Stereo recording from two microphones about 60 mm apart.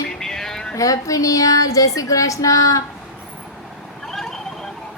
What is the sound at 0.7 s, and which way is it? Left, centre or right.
Child singing, left.